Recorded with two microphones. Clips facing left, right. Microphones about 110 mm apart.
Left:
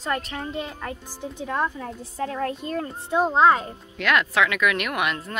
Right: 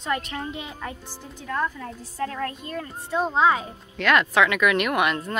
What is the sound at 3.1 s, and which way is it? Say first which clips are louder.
Speech: left 3 dB; centre (ahead or behind).